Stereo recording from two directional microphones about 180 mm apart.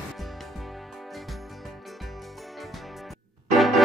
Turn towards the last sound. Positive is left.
turn(degrees=0)  # may be behind; listen again after turning